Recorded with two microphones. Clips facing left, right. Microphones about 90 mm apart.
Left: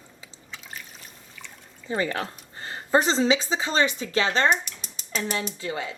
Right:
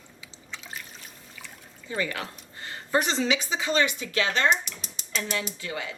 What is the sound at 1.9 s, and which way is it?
Speech, 35° left (ahead or behind).